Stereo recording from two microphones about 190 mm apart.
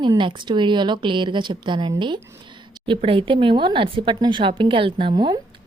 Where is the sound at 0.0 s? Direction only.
25° right (ahead or behind).